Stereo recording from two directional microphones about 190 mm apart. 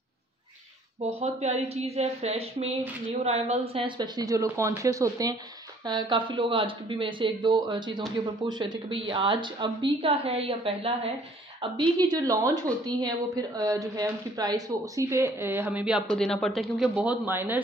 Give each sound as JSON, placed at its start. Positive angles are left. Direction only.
{"t": 1.0, "sound": "a woman's voice", "side_deg": -35}